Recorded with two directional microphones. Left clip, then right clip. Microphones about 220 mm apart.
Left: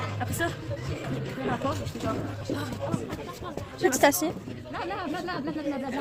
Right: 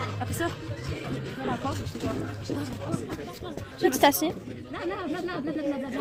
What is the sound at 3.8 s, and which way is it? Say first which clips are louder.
Speech: right 1 dB; centre (ahead or behind).